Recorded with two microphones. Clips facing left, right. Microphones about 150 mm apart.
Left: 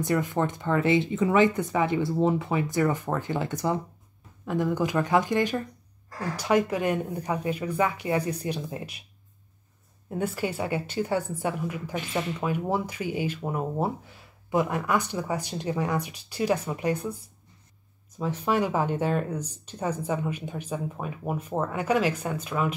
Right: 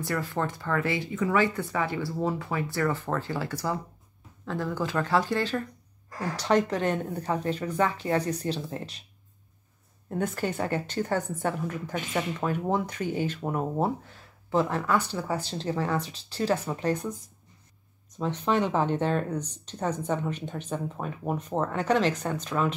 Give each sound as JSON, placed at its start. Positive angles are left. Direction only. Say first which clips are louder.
{"t": 0.0, "sound": "speech", "louder": "left 4 dB", "side_deg": 20}
{"t": 10.0, "sound": "speech", "louder": "even", "side_deg": 10}